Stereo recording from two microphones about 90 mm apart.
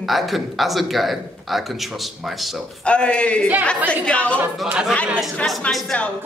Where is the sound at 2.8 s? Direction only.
10° left (ahead or behind).